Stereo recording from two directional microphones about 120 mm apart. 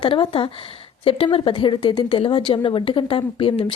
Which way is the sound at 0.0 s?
45° left (ahead or behind).